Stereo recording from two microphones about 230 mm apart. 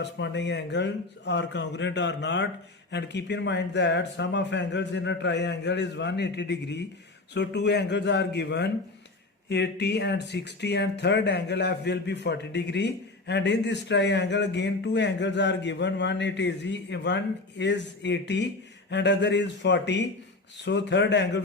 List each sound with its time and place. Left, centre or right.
0.0 s speech: left